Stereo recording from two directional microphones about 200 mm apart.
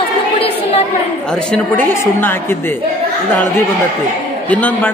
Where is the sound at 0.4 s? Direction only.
30° left (ahead or behind).